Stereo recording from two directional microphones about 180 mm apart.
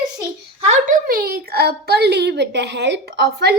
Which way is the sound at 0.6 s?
40° right (ahead or behind).